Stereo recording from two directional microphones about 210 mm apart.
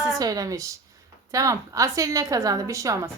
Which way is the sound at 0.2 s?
15° right (ahead or behind).